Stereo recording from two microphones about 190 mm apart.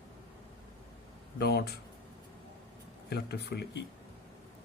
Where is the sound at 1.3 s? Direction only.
55° left (ahead or behind).